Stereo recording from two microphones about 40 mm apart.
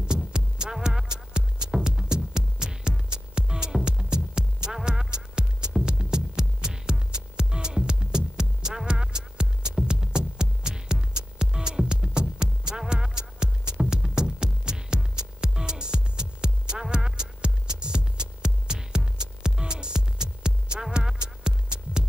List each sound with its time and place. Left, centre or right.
0.0 s music: right